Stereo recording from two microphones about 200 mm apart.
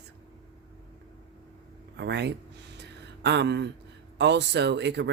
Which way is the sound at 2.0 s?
60° right (ahead or behind).